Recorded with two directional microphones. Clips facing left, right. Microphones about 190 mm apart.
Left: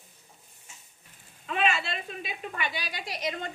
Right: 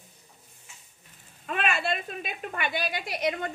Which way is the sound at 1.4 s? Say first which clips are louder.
Even; 55° right (ahead or behind).